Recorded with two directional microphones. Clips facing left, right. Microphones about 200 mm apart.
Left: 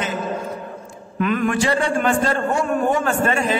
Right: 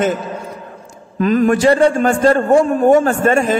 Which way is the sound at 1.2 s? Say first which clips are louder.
Right 7 dB; 35° right (ahead or behind).